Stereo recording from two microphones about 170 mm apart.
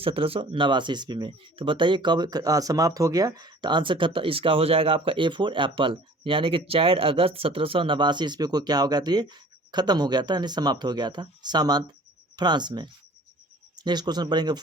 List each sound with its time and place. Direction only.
0.0 s speech: 35° right (ahead or behind)